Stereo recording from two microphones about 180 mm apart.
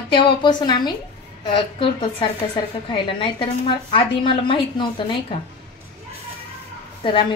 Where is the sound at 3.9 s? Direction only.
30° left (ahead or behind).